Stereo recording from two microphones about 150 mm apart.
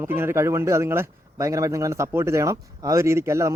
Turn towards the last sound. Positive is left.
turn(degrees=-20)  # may be behind; listen again after turning